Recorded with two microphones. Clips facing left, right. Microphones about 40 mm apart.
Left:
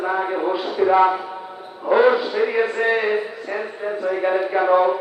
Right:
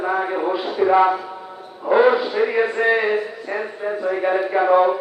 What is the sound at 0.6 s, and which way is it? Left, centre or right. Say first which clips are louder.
A man's voice: even; centre.